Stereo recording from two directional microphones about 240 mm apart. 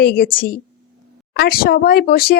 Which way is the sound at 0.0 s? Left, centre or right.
Left.